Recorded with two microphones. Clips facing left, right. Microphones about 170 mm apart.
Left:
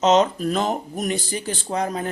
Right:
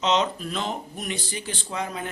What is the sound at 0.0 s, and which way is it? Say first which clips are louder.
Speech: left 7 dB; 45° left (ahead or behind).